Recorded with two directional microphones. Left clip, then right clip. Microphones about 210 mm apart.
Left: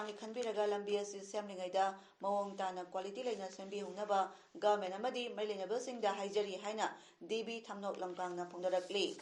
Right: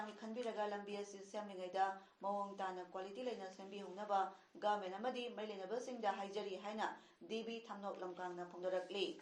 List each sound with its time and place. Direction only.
0.3 s speech: 40° left (ahead or behind)